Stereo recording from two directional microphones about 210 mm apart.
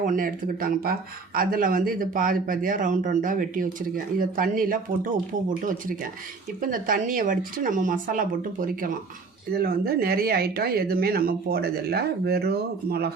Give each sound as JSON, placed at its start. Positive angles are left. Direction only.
{"t": 0.0, "sound": "speech", "side_deg": -40}
{"t": 6.6, "sound": "speech", "side_deg": -40}